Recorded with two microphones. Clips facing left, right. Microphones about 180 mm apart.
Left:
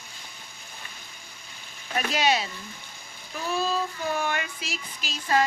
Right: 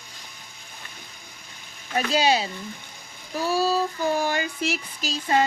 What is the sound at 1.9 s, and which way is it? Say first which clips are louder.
Speech: right 3 dB; 30° right (ahead or behind).